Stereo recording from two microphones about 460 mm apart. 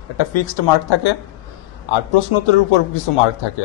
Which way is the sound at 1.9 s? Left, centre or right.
Left.